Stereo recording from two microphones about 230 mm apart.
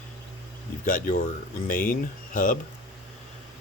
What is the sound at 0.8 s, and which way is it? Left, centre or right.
Speech, left.